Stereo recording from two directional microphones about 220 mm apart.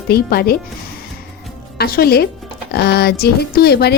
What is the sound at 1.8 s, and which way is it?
Speech, 45° left (ahead or behind).